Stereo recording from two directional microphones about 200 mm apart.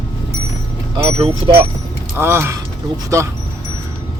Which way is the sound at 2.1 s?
10° right (ahead or behind).